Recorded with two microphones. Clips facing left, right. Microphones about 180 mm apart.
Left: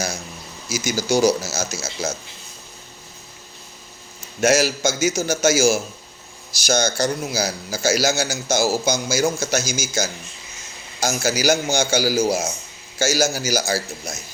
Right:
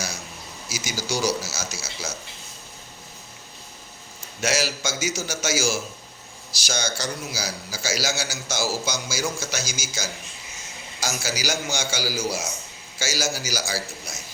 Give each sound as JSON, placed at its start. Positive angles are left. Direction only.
{"t": 0.7, "sound": "a man's voice", "side_deg": 45}
{"t": 4.4, "sound": "a man's voice", "side_deg": 50}